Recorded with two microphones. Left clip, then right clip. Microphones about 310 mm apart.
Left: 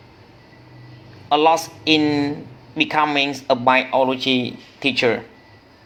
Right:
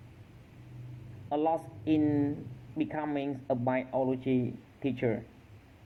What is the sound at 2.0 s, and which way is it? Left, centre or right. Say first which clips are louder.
Speech: left 10 dB; left.